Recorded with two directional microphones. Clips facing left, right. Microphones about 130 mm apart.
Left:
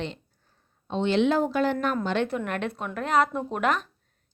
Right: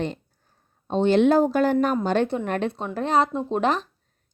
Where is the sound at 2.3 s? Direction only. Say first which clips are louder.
Right 4 dB; 30° right (ahead or behind).